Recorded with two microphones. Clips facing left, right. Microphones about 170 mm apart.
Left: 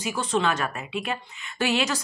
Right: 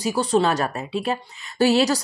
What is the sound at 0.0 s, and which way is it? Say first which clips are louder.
A woman's voice: right 5 dB; 35° right (ahead or behind).